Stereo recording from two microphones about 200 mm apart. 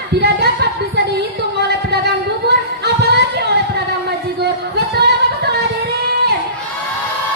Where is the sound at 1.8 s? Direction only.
55° right (ahead or behind).